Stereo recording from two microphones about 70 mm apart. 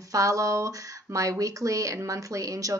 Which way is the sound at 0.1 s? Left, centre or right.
Right.